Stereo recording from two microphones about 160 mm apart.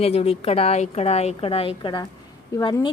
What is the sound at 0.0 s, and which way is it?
A woman's voice, 40° left (ahead or behind).